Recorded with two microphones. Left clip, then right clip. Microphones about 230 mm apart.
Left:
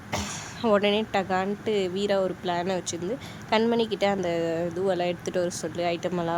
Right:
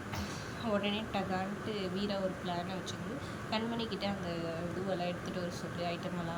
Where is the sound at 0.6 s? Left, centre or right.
Centre.